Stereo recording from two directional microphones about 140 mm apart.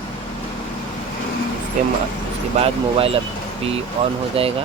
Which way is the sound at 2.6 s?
40° right (ahead or behind).